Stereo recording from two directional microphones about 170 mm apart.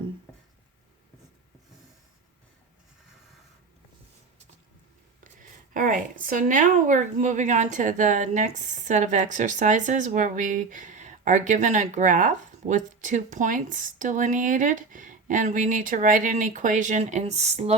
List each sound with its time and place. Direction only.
5.2 s speech: 50° right (ahead or behind)